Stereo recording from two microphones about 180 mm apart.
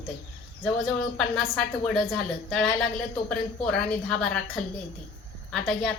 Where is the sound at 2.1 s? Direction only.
Centre (ahead or behind).